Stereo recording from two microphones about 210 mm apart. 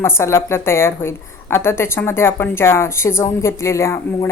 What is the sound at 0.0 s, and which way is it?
A woman's voice, 10° left (ahead or behind).